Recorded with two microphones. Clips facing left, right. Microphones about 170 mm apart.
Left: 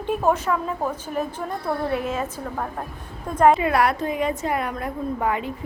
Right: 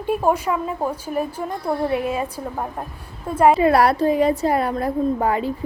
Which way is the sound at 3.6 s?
35° right (ahead or behind).